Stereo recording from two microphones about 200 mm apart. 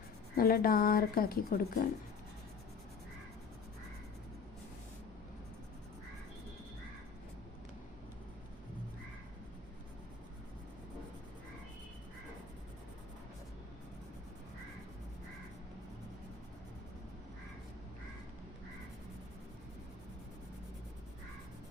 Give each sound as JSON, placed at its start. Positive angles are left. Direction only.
{"t": 0.3, "sound": "speech", "side_deg": 45}